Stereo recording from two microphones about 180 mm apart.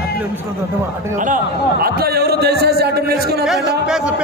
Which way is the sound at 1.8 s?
60° right (ahead or behind).